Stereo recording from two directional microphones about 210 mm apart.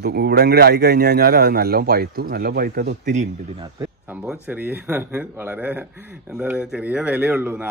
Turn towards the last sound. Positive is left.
turn(degrees=-10)  # may be behind; listen again after turning